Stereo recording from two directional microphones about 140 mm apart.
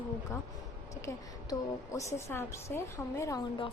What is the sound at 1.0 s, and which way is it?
A woman's voice, 20° left (ahead or behind).